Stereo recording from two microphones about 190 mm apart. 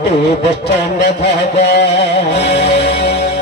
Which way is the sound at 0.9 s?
60° left (ahead or behind).